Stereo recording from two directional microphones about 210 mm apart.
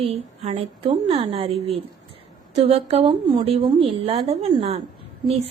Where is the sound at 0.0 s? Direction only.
30° right (ahead or behind).